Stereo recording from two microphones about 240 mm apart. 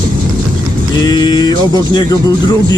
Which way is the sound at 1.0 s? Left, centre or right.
Centre.